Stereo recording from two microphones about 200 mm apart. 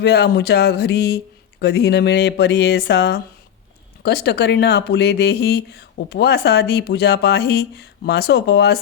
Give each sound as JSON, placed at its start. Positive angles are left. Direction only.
{"t": 0.0, "sound": "speech", "side_deg": 50}